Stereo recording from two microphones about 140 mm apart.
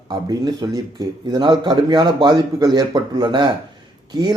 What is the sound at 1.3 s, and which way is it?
A man's voice, 35° right (ahead or behind).